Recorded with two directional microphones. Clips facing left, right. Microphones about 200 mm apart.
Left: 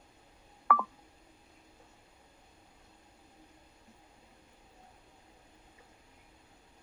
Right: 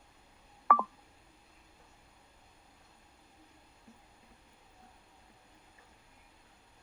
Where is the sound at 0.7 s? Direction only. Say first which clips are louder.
Even; centre (ahead or behind).